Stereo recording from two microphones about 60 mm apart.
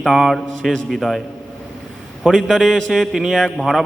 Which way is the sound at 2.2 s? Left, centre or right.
Centre.